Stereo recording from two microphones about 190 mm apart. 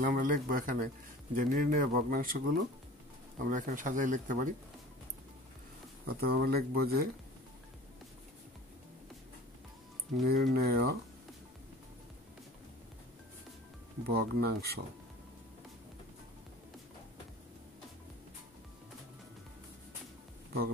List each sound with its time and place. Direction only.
0.0 s speech: 45° right (ahead or behind)
6.0 s speech: 55° right (ahead or behind)
10.2 s speech: 55° right (ahead or behind)
14.0 s speech: 55° right (ahead or behind)